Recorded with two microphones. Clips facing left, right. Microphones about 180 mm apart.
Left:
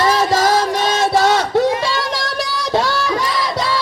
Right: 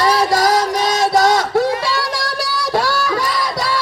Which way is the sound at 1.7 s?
20° left (ahead or behind).